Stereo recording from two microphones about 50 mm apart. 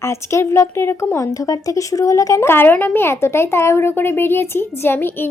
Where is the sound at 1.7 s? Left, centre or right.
Left.